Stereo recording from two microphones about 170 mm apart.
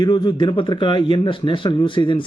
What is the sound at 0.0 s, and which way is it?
Speech, 25° left (ahead or behind).